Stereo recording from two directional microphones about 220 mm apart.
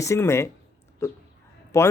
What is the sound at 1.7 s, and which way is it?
Speech, 15° left (ahead or behind).